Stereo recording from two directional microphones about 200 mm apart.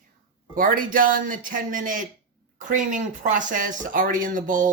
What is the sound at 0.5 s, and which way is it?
Speech, 45° right (ahead or behind).